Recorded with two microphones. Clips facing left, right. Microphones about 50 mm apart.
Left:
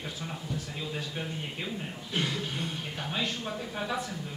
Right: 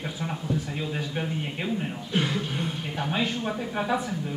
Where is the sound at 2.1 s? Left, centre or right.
Centre.